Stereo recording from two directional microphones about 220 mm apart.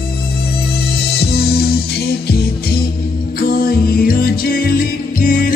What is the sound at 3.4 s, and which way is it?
Music, 45° left (ahead or behind).